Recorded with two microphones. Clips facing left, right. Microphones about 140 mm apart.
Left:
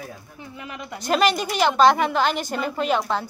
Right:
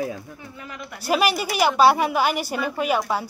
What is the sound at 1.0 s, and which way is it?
Speech, 10° right (ahead or behind).